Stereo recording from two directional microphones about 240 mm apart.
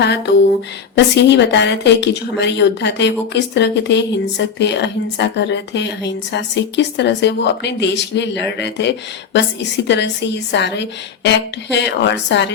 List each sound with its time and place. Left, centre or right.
0.9 s a woman's voice: left